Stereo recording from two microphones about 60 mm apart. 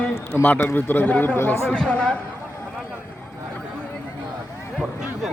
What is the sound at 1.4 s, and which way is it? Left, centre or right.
Speech, left.